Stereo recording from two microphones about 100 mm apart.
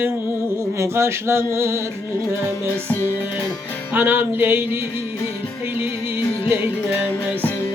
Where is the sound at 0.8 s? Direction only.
25° right (ahead or behind).